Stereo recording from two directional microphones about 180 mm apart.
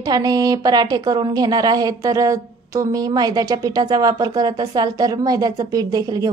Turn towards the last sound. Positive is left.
turn(degrees=-20)  # may be behind; listen again after turning